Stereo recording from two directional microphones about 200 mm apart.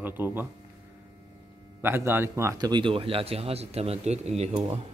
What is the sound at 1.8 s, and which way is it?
A man's voice, 10° right (ahead or behind).